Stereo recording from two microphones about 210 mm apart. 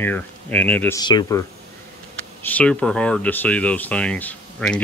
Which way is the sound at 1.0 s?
20° left (ahead or behind).